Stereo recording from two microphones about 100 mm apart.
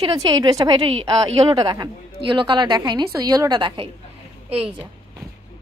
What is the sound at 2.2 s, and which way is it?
A woman's voice, 55° right (ahead or behind).